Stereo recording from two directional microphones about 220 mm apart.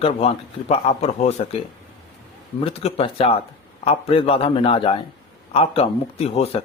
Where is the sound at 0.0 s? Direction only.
25° left (ahead or behind).